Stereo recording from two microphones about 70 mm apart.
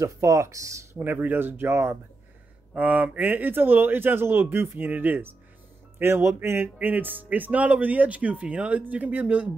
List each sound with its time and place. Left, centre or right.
0.0 s speech: right
0.9 s speech: right
2.7 s speech: centre